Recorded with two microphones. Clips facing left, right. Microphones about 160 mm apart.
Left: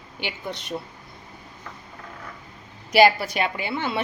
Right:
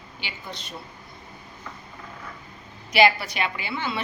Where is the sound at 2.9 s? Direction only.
45° left (ahead or behind).